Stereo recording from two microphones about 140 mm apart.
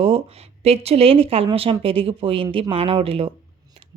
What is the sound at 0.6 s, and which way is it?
A woman's voice, 45° right (ahead or behind).